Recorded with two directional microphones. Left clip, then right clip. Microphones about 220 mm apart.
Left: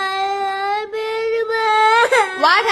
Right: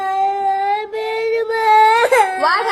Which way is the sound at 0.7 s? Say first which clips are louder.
Right 2 dB; 65° left (ahead or behind).